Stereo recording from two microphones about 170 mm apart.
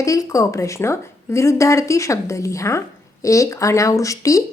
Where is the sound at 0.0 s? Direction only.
20° left (ahead or behind).